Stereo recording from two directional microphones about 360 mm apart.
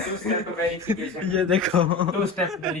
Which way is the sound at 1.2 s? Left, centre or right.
Centre.